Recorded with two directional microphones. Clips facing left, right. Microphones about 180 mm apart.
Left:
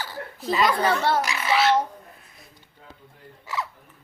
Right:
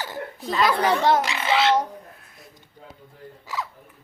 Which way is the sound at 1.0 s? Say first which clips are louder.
Right 3 dB; 20° right (ahead or behind).